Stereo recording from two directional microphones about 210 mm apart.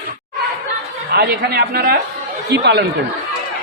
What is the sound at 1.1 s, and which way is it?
A man's voice, 50° right (ahead or behind).